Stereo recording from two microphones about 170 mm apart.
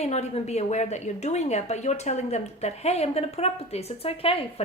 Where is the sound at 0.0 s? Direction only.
40° left (ahead or behind).